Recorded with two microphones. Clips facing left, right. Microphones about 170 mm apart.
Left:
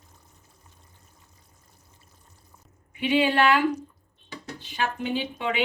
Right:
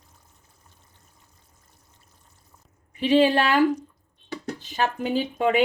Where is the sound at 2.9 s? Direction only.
35° right (ahead or behind).